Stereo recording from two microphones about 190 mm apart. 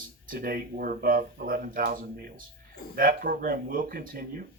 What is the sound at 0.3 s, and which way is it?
Speech, 50° right (ahead or behind).